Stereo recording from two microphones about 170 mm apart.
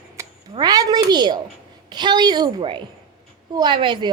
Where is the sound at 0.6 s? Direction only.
20° right (ahead or behind).